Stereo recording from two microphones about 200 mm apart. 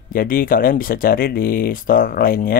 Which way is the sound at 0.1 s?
45° left (ahead or behind).